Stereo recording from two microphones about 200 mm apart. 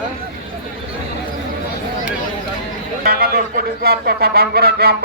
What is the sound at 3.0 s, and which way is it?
Speech, 50° right (ahead or behind).